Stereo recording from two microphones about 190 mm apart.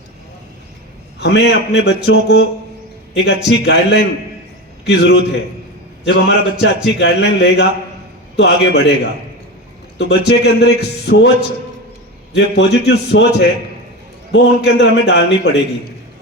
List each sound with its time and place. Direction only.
1.2 s a man's voice: 65° left (ahead or behind)
10.0 s a man's voice: 65° left (ahead or behind)
12.3 s a man's voice: 65° left (ahead or behind)